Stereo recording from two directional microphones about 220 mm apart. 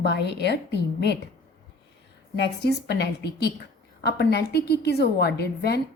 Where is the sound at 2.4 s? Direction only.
50° left (ahead or behind).